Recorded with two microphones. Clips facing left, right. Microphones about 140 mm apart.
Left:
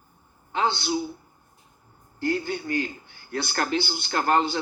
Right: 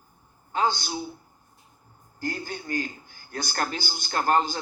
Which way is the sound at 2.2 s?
40° right (ahead or behind).